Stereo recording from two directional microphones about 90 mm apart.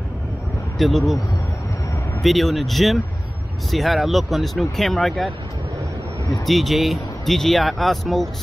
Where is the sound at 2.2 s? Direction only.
Centre (ahead or behind).